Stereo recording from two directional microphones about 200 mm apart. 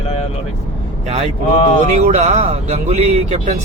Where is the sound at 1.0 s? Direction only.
30° right (ahead or behind).